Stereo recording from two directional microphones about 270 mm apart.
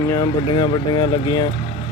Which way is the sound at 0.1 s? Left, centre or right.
Centre.